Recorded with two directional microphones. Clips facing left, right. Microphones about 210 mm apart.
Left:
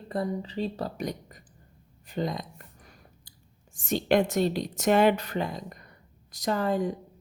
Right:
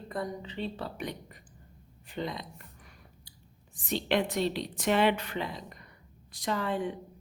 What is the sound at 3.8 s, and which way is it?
A woman's voice, 45° left (ahead or behind).